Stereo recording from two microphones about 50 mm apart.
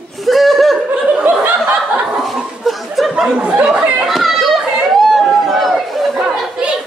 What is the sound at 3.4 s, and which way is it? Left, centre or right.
Speech, right.